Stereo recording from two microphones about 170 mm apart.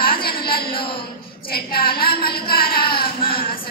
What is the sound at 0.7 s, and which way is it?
Speech, 30° left (ahead or behind).